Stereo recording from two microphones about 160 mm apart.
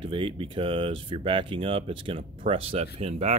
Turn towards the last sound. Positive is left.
turn(degrees=-40)  # may be behind; listen again after turning